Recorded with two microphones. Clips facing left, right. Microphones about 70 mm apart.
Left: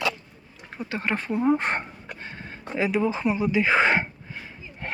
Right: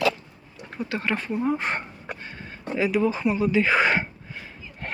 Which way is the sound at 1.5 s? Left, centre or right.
Left.